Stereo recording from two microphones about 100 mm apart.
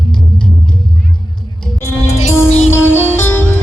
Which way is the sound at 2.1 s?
90° left.